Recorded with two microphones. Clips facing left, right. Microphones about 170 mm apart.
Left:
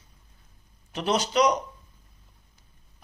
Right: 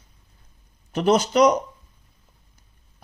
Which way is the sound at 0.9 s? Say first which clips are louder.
Right 6 dB; 45° right (ahead or behind).